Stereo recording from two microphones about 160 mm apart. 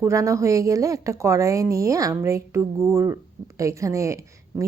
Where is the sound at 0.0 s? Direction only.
20° right (ahead or behind).